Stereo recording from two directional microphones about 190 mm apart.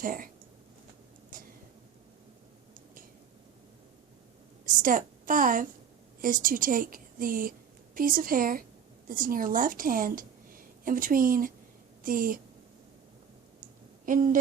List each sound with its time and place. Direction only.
0.0 s a woman's voice: 45° right (ahead or behind)
1.3 s a sound: 45° right (ahead or behind)
4.6 s a woman's voice: 45° right (ahead or behind)
14.0 s speech: 45° right (ahead or behind)